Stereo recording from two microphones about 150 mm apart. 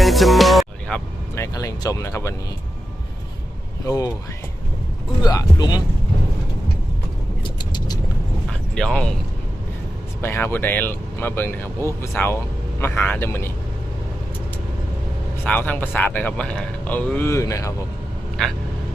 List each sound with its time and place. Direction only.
0.0 s speech: centre (ahead or behind)
1.4 s speech: 20° left (ahead or behind)
3.8 s speech: 25° left (ahead or behind)
5.2 s speech: 25° left (ahead or behind)
7.4 s vehicle: 30° left (ahead or behind)
8.7 s speech: 5° left (ahead or behind)
10.2 s speech: 15° left (ahead or behind)
15.4 s speech: 10° left (ahead or behind)